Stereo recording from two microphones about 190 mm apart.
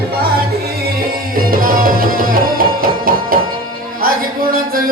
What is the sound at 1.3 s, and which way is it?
Music, 50° right (ahead or behind).